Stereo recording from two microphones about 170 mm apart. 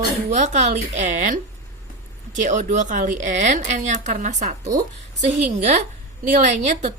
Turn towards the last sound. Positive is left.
turn(degrees=-45)  # may be behind; listen again after turning